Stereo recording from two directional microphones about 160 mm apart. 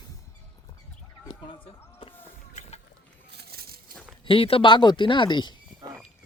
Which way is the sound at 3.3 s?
80° right.